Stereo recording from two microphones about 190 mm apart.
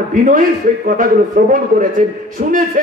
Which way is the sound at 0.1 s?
45° right (ahead or behind).